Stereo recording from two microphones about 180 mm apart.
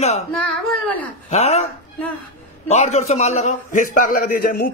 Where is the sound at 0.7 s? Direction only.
5° left (ahead or behind).